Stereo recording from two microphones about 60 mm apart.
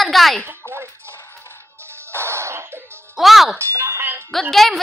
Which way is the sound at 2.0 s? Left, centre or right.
Right.